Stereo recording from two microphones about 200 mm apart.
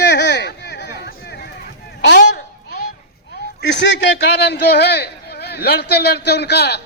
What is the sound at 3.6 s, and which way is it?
A man's voice, 60° left (ahead or behind).